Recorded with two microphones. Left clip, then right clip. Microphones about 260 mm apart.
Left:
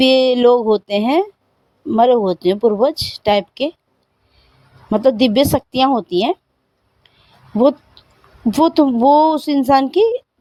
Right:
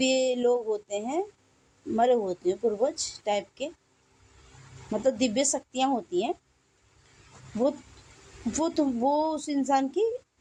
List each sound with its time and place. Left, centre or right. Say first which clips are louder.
0.0 s a woman's voice: left 13 dB; left
4.9 s a woman's voice: left 12 dB; left
8.5 s speech: left 14 dB; left